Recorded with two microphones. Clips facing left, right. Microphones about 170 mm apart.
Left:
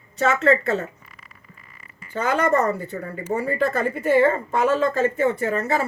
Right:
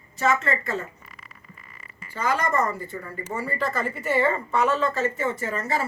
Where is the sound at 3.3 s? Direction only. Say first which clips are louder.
Left 6 dB; 60° left (ahead or behind).